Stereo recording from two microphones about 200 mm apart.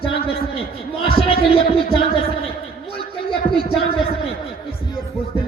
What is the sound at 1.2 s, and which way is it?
Music, 30° left (ahead or behind).